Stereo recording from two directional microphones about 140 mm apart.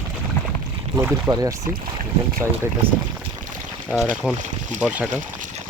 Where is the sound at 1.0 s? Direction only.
20° right (ahead or behind).